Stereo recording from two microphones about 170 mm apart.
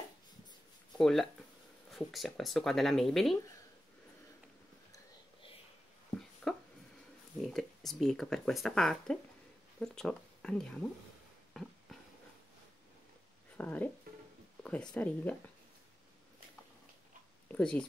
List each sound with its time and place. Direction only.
0.9 s speech: 5° left (ahead or behind)
6.5 s a sound: 5° left (ahead or behind)
7.4 s speech: centre (ahead or behind)
11.6 s a sound: centre (ahead or behind)
13.6 s speech: 10° left (ahead or behind)
14.1 s music: 65° right (ahead or behind)
14.6 s speech: 10° left (ahead or behind)
17.5 s speech: 5° left (ahead or behind)